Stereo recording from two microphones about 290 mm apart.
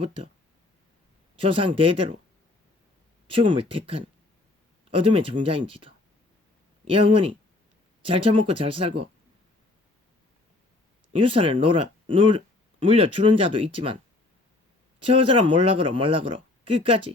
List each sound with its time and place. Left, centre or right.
0.0 s speech: centre
1.4 s speech: centre
3.2 s speech: centre
6.9 s speech: centre
11.2 s speech: centre